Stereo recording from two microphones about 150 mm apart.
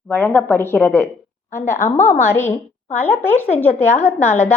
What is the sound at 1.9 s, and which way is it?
Speech, 55° left (ahead or behind).